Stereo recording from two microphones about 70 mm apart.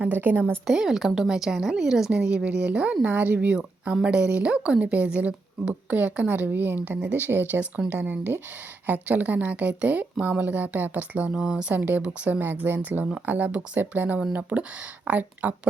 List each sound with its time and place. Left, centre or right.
0.0 s a woman's voice: right
0.7 s a woman's voice: centre
12.4 s a woman's voice: right